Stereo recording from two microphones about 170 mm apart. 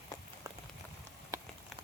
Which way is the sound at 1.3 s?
20° right (ahead or behind).